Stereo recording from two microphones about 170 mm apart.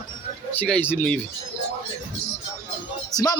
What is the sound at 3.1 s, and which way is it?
Music, 20° left (ahead or behind).